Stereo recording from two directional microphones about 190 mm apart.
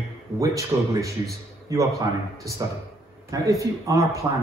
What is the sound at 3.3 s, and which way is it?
Speech, 15° right (ahead or behind).